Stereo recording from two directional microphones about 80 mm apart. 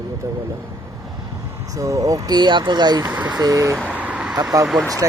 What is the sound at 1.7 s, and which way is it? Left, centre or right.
Speech, right.